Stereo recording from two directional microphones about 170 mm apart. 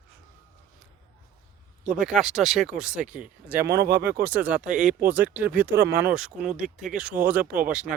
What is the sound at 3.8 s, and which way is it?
Speech, 70° right (ahead or behind).